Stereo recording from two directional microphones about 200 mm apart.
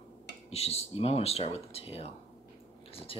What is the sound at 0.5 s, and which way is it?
Speech, 30° left (ahead or behind).